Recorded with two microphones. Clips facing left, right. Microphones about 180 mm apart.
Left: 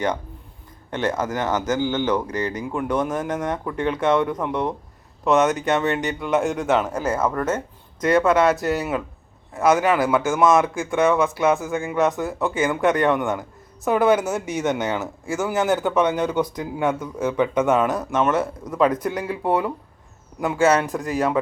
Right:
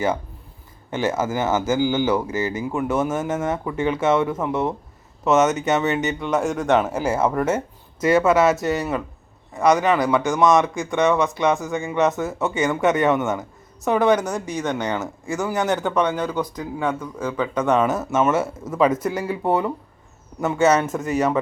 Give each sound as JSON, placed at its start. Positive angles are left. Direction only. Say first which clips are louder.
{"t": 0.9, "sound": "speech", "louder": "right 1 dB", "side_deg": -5}
{"t": 16.0, "sound": "speech", "louder": "left 2 dB", "side_deg": 20}
{"t": 17.6, "sound": "speech", "louder": "right 2 dB", "side_deg": 5}